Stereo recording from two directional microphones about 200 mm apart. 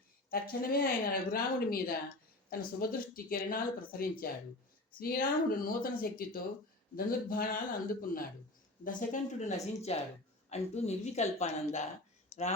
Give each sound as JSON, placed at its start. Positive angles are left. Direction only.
{"t": 0.3, "sound": "speech", "side_deg": 45}
{"t": 8.8, "sound": "a woman's voice", "side_deg": 40}